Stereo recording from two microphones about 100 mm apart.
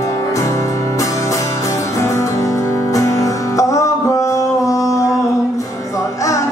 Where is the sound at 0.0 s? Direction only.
35° left (ahead or behind).